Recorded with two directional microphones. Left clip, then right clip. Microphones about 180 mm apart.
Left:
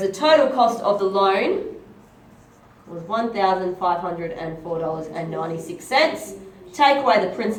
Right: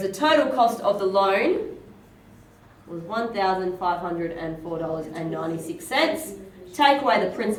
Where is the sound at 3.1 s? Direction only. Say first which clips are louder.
Left 4 dB; 30° right (ahead or behind).